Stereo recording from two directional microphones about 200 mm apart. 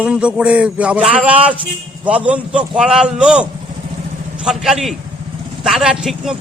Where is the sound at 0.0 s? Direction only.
5° right (ahead or behind).